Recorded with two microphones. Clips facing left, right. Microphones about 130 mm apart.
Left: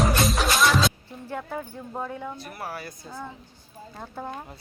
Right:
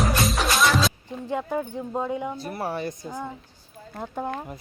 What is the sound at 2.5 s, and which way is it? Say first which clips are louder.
Speech: right 7 dB; 30° right (ahead or behind).